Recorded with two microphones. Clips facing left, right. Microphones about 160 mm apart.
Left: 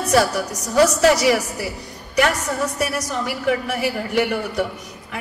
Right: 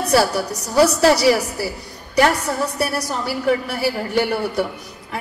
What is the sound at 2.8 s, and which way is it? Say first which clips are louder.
A woman's voice: right 1 dB; 35° right (ahead or behind).